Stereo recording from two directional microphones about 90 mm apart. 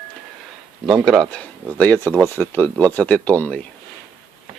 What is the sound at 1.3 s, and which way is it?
Speech, 15° left (ahead or behind).